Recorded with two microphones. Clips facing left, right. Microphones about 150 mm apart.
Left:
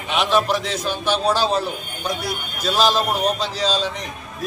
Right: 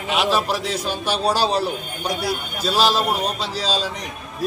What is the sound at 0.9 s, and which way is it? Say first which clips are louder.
Speech: left 2 dB; 35° right (ahead or behind).